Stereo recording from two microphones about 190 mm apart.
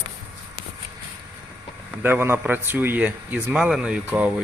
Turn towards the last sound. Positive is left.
turn(degrees=-5)  # may be behind; listen again after turning